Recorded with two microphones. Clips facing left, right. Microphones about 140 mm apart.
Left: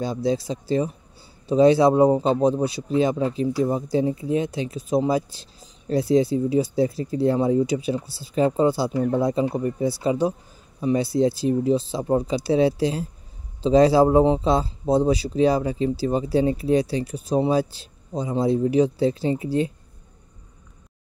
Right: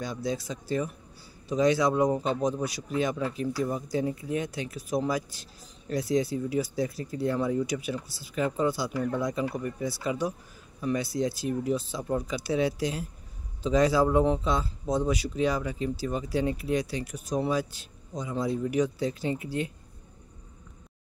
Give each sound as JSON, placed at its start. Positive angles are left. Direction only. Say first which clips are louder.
{"t": 0.0, "sound": "a man's voice", "louder": "left 8 dB", "side_deg": 30}